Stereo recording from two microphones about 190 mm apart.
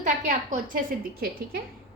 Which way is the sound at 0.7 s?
50° right (ahead or behind).